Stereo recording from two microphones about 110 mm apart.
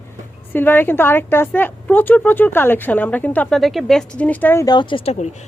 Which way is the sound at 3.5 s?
5° left (ahead or behind).